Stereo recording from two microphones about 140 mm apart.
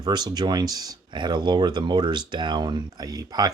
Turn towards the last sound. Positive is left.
turn(degrees=-25)  # may be behind; listen again after turning